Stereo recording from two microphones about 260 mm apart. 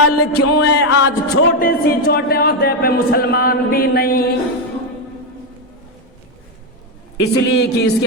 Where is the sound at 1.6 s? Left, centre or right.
Left.